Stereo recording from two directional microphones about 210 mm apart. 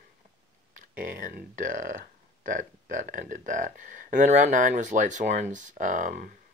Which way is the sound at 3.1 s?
40° right (ahead or behind).